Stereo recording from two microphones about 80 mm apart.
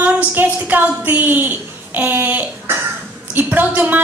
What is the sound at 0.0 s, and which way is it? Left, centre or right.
A woman's voice, centre.